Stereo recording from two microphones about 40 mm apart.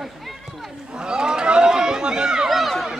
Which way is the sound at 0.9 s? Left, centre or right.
Right.